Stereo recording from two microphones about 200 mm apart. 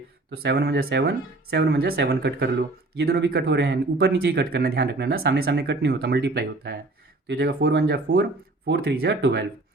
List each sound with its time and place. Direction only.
0.3 s speech: 55° right (ahead or behind)